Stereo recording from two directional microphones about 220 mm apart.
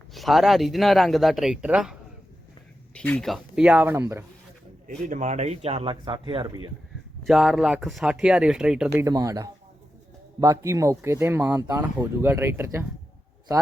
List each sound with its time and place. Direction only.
0.1 s speech: centre (ahead or behind)
5.0 s speech: 35° right (ahead or behind)
7.3 s speech: centre (ahead or behind)
9.0 s speech: 15° right (ahead or behind)